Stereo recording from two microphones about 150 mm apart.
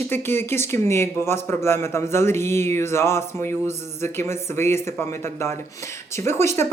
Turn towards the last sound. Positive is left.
turn(degrees=20)  # may be behind; listen again after turning